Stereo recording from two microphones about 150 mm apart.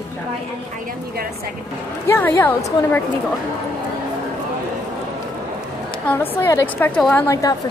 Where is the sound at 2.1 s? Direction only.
15° left (ahead or behind).